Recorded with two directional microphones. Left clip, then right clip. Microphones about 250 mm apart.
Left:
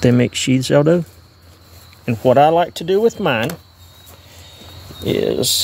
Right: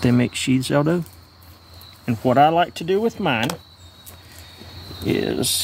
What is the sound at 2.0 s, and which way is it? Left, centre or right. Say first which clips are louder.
Speech: left 4 dB; centre.